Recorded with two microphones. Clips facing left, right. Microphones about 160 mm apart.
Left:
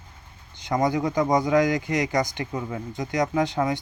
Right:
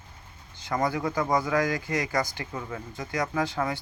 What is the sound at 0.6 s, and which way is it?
Speech, 20° left (ahead or behind).